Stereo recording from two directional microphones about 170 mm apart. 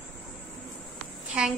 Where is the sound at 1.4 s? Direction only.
5° right (ahead or behind).